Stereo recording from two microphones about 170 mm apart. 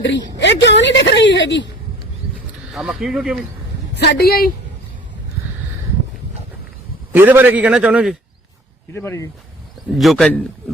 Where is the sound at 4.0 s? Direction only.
65° left (ahead or behind).